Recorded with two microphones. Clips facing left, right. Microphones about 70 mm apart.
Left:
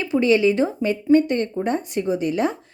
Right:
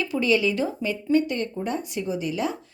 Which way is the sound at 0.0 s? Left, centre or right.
Left.